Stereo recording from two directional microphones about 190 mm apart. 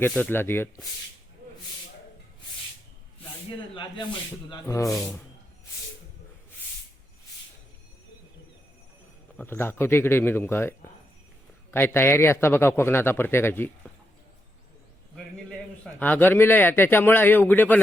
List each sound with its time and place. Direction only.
0.0 s a man's voice: 10° left (ahead or behind)
4.4 s a man's voice: 20° left (ahead or behind)
9.4 s a man's voice: 10° left (ahead or behind)
15.1 s a man's voice: 5° left (ahead or behind)